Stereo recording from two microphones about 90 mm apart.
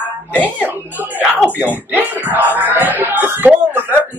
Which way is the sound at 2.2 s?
20° right (ahead or behind).